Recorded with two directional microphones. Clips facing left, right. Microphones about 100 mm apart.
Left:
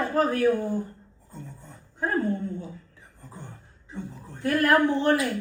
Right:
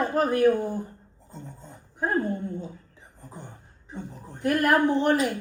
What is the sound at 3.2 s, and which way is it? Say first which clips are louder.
Speech: right 1 dB; 15° right (ahead or behind).